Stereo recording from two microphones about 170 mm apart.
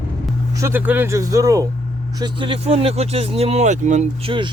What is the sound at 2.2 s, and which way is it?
Speech, 30° right (ahead or behind).